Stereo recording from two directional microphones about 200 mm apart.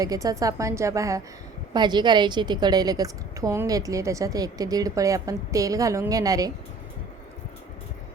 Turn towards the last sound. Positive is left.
turn(degrees=-20)  # may be behind; listen again after turning